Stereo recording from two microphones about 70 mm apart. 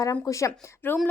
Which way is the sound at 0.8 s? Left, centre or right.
Left.